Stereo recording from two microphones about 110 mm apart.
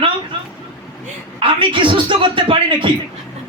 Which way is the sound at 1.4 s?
50° right (ahead or behind).